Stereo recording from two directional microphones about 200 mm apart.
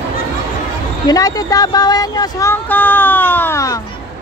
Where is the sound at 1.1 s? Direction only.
20° left (ahead or behind).